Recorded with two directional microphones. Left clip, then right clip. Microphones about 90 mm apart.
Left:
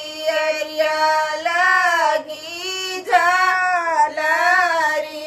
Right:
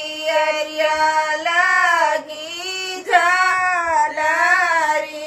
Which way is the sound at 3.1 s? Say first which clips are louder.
Even; 20° right (ahead or behind).